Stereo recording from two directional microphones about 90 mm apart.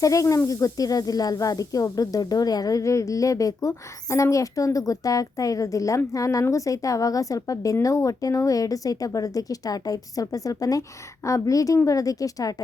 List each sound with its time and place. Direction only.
0.0 s speech: 40° left (ahead or behind)